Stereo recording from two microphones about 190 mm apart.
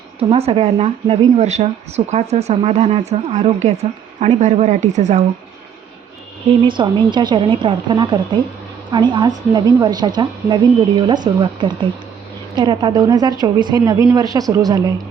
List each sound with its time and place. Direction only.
0.2 s speech: 30° right (ahead or behind)
6.5 s a woman's voice: 25° right (ahead or behind)
12.5 s a woman's voice: 25° right (ahead or behind)